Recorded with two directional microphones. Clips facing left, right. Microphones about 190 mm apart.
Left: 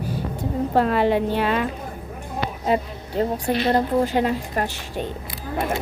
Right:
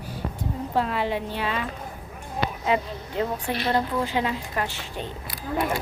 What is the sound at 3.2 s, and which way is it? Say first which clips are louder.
A woman's voice: left 5 dB; 40° left (ahead or behind).